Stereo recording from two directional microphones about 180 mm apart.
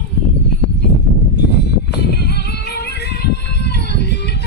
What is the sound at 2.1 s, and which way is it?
Music, 60° left (ahead or behind).